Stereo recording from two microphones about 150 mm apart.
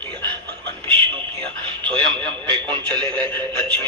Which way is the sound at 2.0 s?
30° right (ahead or behind).